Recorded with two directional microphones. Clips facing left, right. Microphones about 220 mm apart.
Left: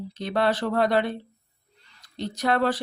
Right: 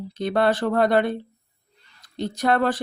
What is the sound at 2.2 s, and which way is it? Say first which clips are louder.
Speech: right 2 dB; 50° right (ahead or behind).